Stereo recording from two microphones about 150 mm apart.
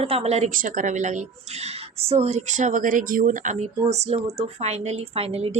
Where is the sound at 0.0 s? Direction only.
40° right (ahead or behind).